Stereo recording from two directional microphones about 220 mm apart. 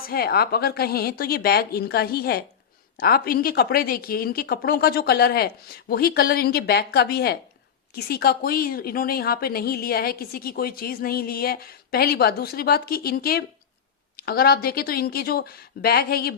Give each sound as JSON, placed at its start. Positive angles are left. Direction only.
{"t": 0.1, "sound": "a woman's voice", "side_deg": 45}